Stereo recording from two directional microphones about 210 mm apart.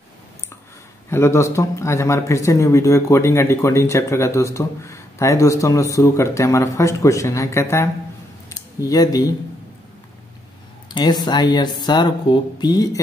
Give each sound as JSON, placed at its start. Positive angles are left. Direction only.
{"t": 1.1, "sound": "speech", "side_deg": 15}
{"t": 10.9, "sound": "speech", "side_deg": 20}